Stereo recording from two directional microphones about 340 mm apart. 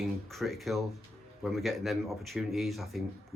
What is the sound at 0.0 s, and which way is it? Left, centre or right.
Speech, centre.